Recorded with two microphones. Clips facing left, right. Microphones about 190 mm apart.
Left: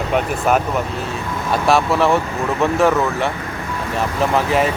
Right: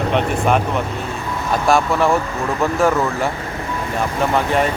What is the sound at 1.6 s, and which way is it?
Speech, centre (ahead or behind).